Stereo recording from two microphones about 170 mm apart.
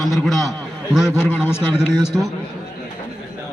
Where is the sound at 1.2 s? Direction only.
15° left (ahead or behind).